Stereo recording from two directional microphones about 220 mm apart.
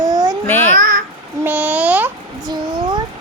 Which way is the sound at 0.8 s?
40° right (ahead or behind).